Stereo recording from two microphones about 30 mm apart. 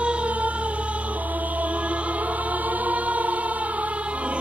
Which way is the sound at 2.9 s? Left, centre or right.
Right.